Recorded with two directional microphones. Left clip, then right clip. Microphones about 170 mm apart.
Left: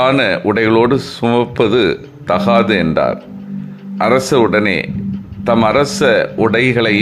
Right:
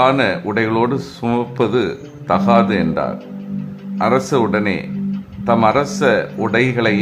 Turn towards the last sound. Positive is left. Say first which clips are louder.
# left 3 dB
turn(degrees=25)  # may be behind; listen again after turning